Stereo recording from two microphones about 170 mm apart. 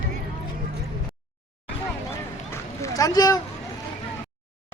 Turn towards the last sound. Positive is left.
turn(degrees=20)  # may be behind; listen again after turning